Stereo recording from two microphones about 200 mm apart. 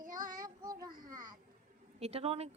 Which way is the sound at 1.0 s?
20° right (ahead or behind).